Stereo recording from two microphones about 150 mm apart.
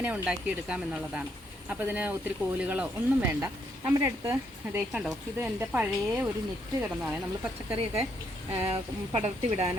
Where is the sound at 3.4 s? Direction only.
20° right (ahead or behind).